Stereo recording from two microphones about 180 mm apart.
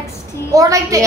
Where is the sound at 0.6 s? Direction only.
20° right (ahead or behind).